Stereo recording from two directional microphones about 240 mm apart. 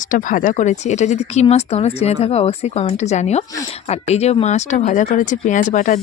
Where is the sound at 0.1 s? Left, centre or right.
Left.